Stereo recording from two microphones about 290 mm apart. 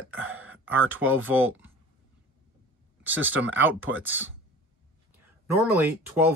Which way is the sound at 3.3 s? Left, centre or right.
Right.